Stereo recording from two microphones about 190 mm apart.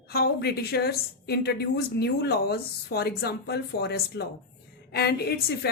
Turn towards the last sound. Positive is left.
turn(degrees=55)  # may be behind; listen again after turning